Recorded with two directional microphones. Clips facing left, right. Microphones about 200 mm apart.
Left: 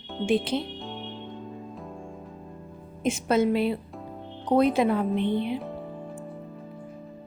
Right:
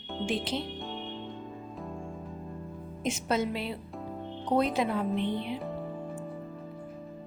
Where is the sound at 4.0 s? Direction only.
Centre (ahead or behind).